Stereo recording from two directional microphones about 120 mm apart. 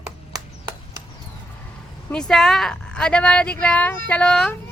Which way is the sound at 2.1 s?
5° left (ahead or behind).